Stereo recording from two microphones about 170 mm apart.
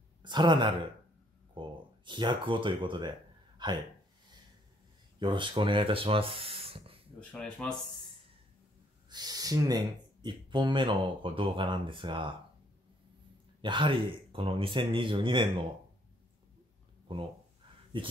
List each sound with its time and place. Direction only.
0.2 s speech: 25° right (ahead or behind)
3.5 s a sound: 25° right (ahead or behind)
5.2 s speech: 30° right (ahead or behind)
7.2 s speech: 5° left (ahead or behind)
9.1 s speech: 25° right (ahead or behind)
13.6 s speech: 30° right (ahead or behind)
17.1 s speech: 30° right (ahead or behind)